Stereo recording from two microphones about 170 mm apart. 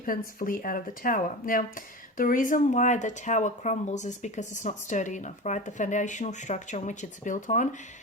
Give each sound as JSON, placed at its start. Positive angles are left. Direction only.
{"t": 0.0, "sound": "speech", "side_deg": 55}